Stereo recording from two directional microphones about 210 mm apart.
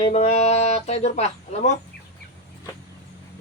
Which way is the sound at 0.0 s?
30° left (ahead or behind).